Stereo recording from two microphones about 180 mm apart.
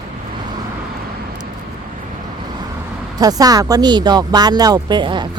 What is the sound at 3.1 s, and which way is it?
Speech, 20° right (ahead or behind).